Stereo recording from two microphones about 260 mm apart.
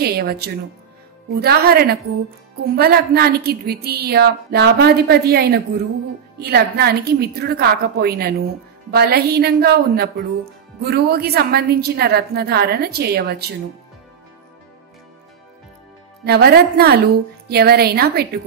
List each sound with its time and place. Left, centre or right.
0.0 s a woman's voice: right
16.3 s a woman's voice: right